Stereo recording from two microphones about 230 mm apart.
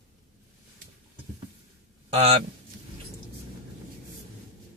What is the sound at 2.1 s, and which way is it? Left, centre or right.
Speech, right.